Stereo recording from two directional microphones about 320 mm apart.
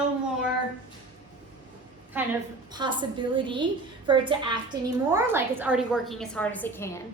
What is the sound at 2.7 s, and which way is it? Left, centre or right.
A woman's voice, centre.